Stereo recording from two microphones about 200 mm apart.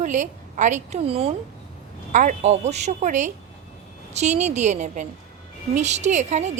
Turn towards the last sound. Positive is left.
turn(degrees=-35)  # may be behind; listen again after turning